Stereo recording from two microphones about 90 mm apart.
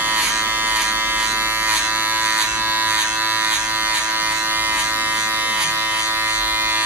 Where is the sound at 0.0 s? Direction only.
20° right (ahead or behind).